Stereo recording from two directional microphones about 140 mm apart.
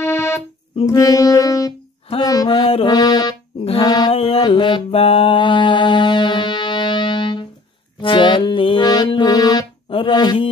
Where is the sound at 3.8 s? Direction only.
30° left (ahead or behind).